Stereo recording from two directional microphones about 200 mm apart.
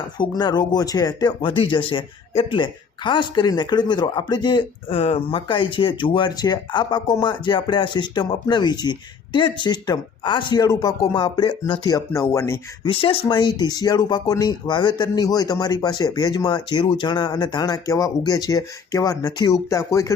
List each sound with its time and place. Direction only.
0.2 s speech: 20° left (ahead or behind)
12.8 s speech: 25° left (ahead or behind)